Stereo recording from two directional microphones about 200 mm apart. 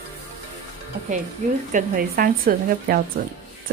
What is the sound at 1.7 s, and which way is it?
Speech, 45° right (ahead or behind).